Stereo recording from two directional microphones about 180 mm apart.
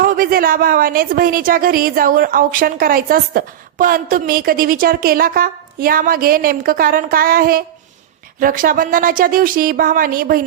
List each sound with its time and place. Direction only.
0.0 s a woman's voice: 55° right (ahead or behind)